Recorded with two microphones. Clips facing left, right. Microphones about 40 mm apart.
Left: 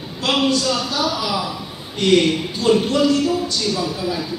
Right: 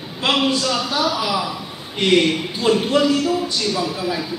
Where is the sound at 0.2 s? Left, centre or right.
Centre.